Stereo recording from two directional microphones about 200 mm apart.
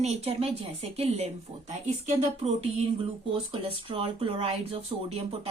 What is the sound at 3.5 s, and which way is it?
Speech, 25° right (ahead or behind).